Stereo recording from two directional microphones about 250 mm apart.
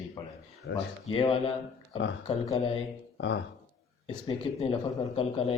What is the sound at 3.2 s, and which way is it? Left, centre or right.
Speech, left.